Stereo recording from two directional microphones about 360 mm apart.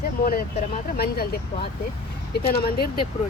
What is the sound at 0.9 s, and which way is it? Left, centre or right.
Speech, left.